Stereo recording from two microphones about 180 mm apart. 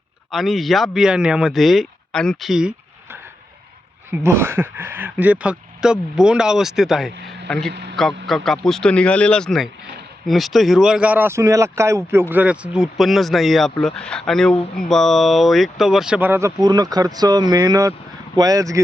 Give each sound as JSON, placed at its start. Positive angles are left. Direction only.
{"t": 0.3, "sound": "speech", "side_deg": 0}
{"t": 7.7, "sound": "a man's voice", "side_deg": -65}
{"t": 7.9, "sound": "speech", "side_deg": 0}
{"t": 16.6, "sound": "speech", "side_deg": -20}